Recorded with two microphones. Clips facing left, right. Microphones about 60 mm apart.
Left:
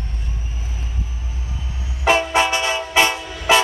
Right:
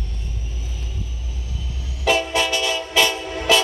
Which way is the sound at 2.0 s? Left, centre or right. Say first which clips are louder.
Left 3 dB; left.